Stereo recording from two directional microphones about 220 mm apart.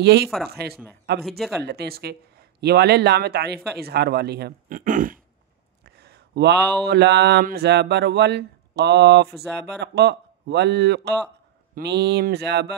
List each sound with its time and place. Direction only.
0.0 s speech: 50° right (ahead or behind)
5.9 s a sound: 50° right (ahead or behind)
6.9 s speech: 50° right (ahead or behind)